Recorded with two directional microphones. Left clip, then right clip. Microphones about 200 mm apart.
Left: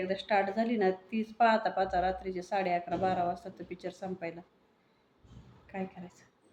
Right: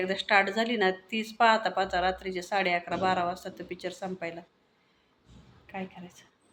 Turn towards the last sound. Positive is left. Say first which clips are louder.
# right 1 dB
turn(degrees=10)  # may be behind; listen again after turning